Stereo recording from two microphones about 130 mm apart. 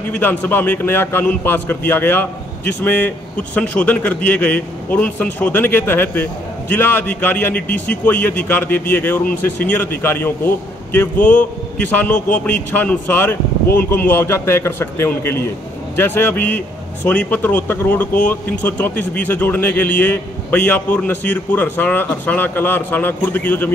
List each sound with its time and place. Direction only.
0.1 s a man's voice: 10° left (ahead or behind)